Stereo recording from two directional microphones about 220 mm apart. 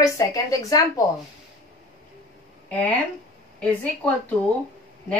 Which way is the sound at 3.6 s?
5° left (ahead or behind).